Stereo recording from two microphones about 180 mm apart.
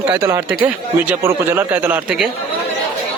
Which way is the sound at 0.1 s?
15° right (ahead or behind).